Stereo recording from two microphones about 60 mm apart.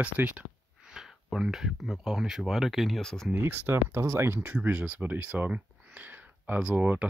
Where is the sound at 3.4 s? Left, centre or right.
Right.